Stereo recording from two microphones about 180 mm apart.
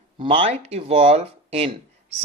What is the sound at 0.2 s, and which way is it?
Speech, 30° right (ahead or behind).